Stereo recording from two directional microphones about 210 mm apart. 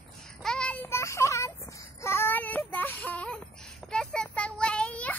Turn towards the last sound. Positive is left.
turn(degrees=5)  # may be behind; listen again after turning